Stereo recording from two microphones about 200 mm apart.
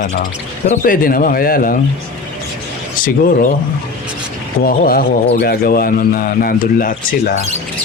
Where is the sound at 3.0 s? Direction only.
45° left (ahead or behind).